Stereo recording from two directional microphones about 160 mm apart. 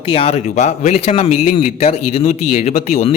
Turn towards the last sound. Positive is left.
turn(degrees=40)  # may be behind; listen again after turning